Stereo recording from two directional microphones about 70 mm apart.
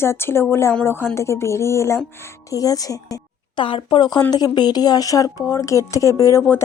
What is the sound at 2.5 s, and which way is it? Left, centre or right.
Speech, left.